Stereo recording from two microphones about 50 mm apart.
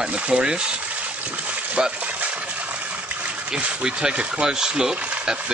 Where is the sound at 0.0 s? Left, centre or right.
Right.